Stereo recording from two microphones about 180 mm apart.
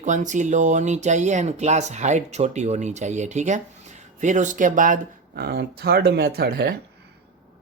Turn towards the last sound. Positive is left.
turn(degrees=-60)  # may be behind; listen again after turning